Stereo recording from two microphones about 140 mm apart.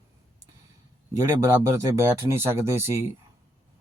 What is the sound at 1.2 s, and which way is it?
Speech, 20° right (ahead or behind).